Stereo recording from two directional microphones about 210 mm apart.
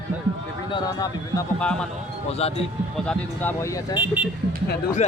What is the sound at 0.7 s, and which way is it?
Speech, 15° left (ahead or behind).